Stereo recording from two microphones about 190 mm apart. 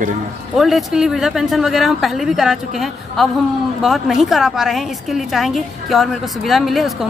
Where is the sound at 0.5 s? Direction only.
Centre (ahead or behind).